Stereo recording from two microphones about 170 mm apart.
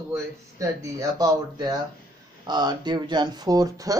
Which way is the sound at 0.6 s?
20° right (ahead or behind).